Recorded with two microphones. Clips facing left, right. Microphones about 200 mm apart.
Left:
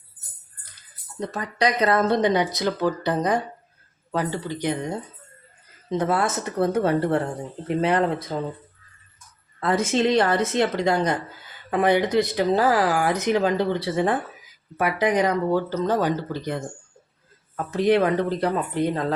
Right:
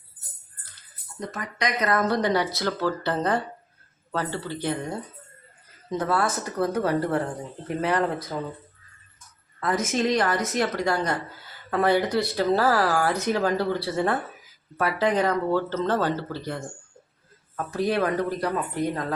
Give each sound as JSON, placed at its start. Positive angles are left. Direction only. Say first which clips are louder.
{"t": 1.3, "sound": "speech", "louder": "left 5 dB", "side_deg": 35}
{"t": 9.6, "sound": "speech", "louder": "left 3 dB", "side_deg": 30}
{"t": 17.7, "sound": "speech", "louder": "left 5 dB", "side_deg": 20}